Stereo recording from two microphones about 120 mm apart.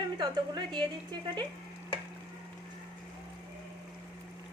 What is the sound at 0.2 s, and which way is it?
Speech, 40° right (ahead or behind).